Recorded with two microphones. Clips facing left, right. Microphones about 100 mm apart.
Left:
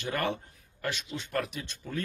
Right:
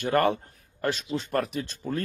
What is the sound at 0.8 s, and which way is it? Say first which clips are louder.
Speech: right 7 dB; 35° right (ahead or behind).